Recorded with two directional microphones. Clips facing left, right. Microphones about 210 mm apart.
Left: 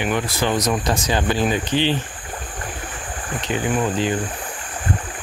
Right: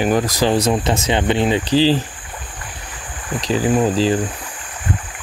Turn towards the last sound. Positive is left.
turn(degrees=-30)  # may be behind; listen again after turning